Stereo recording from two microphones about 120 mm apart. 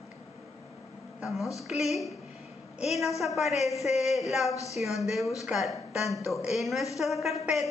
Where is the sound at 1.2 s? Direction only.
Centre (ahead or behind).